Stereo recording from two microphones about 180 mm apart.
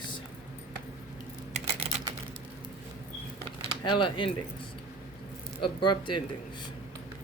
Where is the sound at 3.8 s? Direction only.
25° left (ahead or behind).